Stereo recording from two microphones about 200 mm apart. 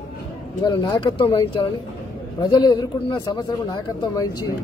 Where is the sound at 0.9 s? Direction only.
25° left (ahead or behind).